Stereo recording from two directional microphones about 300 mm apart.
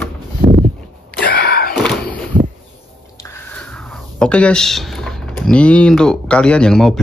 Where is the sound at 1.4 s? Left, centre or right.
Left.